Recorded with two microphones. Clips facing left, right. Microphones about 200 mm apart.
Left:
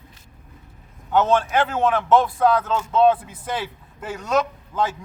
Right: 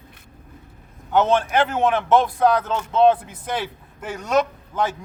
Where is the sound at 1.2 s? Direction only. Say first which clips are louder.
Right 1 dB; 20° right (ahead or behind).